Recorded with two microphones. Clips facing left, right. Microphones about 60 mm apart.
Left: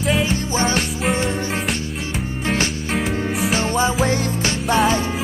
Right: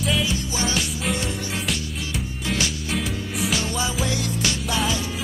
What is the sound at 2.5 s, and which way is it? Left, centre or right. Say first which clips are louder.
Music: left 3 dB; left.